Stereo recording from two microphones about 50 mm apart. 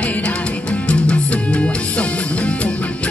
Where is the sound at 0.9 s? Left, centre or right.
Left.